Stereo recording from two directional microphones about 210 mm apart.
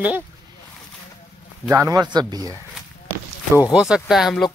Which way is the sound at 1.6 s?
15° right (ahead or behind).